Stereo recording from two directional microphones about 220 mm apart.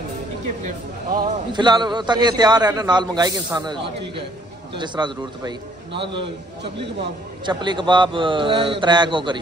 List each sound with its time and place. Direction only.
1.0 s a man's voice: 40° right (ahead or behind)
1.5 s a man's voice: 20° right (ahead or behind)
7.4 s a man's voice: 20° right (ahead or behind)